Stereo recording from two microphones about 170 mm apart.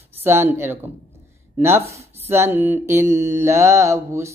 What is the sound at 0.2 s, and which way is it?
Speech, 15° right (ahead or behind).